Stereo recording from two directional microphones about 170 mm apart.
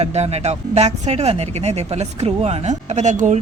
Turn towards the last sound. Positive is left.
turn(degrees=-45)  # may be behind; listen again after turning